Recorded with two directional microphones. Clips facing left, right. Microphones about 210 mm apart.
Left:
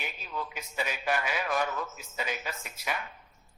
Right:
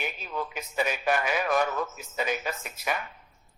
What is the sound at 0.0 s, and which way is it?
A man's voice, 50° right (ahead or behind).